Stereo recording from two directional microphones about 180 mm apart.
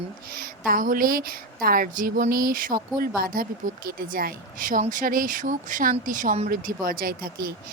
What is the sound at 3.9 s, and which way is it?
Speech, 55° right (ahead or behind).